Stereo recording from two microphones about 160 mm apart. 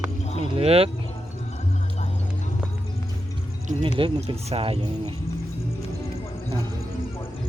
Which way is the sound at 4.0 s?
35° right (ahead or behind).